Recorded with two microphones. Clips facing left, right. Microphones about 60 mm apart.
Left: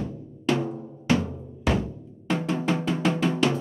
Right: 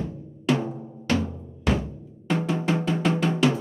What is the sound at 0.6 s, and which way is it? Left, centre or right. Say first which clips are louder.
Drum: left 1 dB; centre.